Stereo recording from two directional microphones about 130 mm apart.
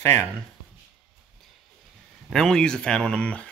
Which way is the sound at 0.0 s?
20° left (ahead or behind).